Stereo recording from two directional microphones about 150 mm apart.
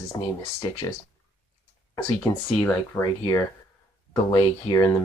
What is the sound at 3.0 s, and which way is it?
Speech, 25° left (ahead or behind).